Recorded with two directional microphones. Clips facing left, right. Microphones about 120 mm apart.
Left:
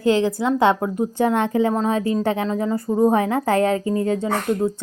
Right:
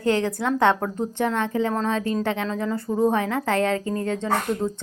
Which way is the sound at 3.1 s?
40° left (ahead or behind).